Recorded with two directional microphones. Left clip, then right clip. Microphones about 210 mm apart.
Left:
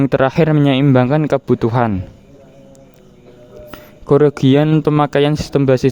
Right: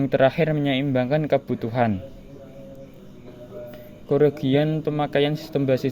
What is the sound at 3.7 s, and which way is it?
Speech, 40° left (ahead or behind).